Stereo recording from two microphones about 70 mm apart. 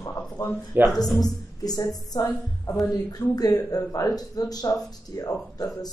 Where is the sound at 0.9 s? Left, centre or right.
Centre.